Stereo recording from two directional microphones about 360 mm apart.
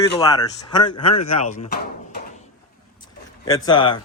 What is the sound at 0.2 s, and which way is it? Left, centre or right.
Speech, centre.